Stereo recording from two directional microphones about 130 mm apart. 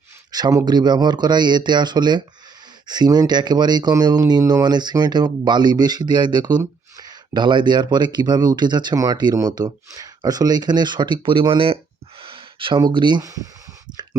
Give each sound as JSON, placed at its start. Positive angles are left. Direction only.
{"t": 0.3, "sound": "speech", "side_deg": -30}